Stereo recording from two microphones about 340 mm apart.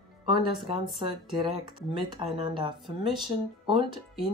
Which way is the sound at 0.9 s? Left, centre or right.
Centre.